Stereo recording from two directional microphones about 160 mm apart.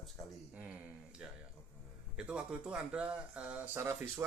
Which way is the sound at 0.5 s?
10° right (ahead or behind).